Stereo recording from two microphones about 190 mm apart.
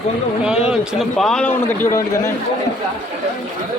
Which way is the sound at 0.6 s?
5° right (ahead or behind).